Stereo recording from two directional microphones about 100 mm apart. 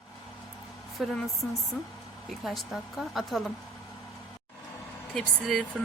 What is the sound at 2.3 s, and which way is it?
A woman's voice, centre (ahead or behind).